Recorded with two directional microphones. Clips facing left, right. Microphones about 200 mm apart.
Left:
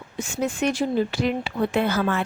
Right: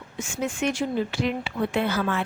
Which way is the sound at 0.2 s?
35° left (ahead or behind).